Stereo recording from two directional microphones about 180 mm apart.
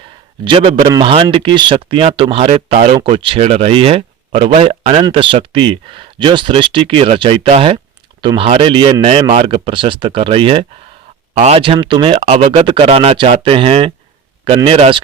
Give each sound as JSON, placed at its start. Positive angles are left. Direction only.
{"t": 0.4, "sound": "speech", "side_deg": -30}